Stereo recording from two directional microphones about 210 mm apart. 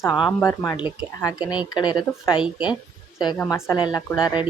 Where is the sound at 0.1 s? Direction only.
Centre (ahead or behind).